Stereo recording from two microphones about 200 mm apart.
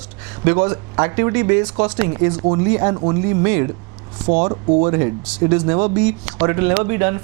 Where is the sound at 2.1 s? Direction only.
25° right (ahead or behind).